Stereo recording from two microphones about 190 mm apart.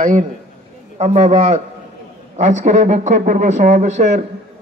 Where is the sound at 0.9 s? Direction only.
35° right (ahead or behind).